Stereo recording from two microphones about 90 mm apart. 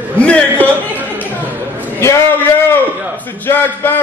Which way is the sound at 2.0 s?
35° left (ahead or behind).